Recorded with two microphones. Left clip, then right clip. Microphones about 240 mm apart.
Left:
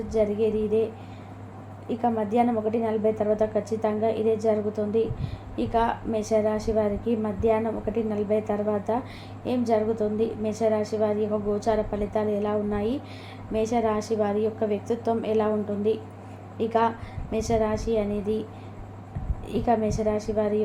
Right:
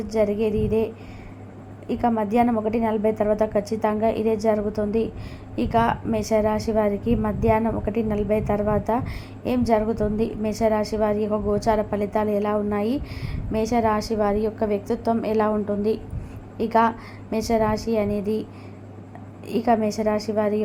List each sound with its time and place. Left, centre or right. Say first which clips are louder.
0.1 s a woman's voice: right 2 dB; right
1.9 s a woman's voice: right 3 dB; right
19.5 s a woman's voice: right 3 dB; right